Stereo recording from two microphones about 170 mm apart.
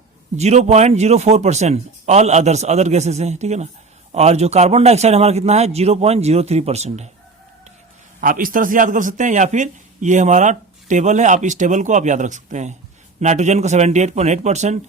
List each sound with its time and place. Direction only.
0.3 s a man's voice: 40° right (ahead or behind)
8.2 s a man's voice: 55° right (ahead or behind)